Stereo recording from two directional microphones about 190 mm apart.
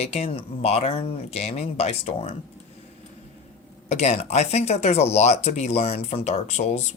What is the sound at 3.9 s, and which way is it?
Speech, 35° left (ahead or behind).